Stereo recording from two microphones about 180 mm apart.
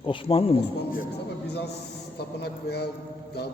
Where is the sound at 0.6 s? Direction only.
65° left (ahead or behind).